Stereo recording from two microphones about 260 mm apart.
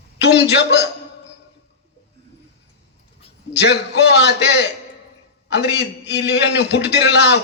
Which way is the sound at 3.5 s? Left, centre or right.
Left.